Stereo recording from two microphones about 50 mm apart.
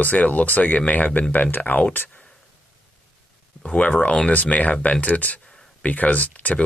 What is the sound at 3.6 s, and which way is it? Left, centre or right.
Speech, left.